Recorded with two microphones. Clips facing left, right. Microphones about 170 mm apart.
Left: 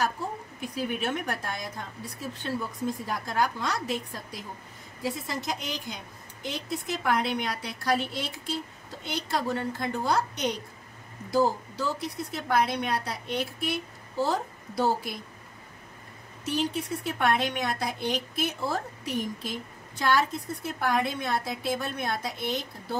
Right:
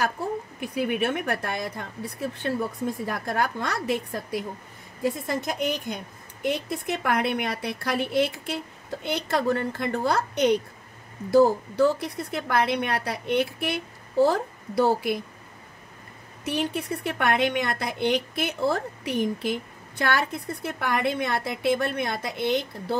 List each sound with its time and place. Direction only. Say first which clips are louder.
0.6 s a woman's voice: right 5 dB; 60° right (ahead or behind)
3.1 s a woman's voice: even; 60° right (ahead or behind)
16.4 s a woman's voice: right 2 dB; 60° right (ahead or behind)